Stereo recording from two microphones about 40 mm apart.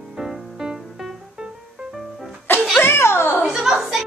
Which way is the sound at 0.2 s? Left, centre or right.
Centre.